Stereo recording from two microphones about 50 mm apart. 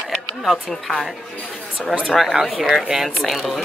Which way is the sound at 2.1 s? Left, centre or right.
Centre.